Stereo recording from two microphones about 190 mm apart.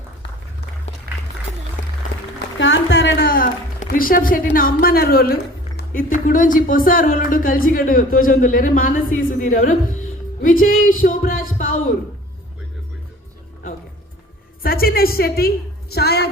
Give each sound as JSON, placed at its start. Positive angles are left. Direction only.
{"t": 2.6, "sound": "a woman's voice", "side_deg": 80}
{"t": 10.4, "sound": "music", "side_deg": 50}
{"t": 14.6, "sound": "a woman's voice", "side_deg": 50}